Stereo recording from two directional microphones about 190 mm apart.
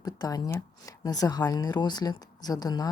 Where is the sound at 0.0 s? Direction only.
20° left (ahead or behind).